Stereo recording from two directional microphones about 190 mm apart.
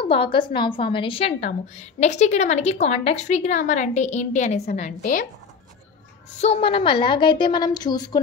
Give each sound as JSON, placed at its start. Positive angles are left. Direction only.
{"t": 0.0, "sound": "a woman's voice", "side_deg": 30}
{"t": 6.4, "sound": "a woman's voice", "side_deg": 30}